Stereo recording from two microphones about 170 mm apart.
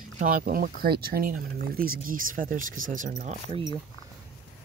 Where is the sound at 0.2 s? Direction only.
55° right (ahead or behind).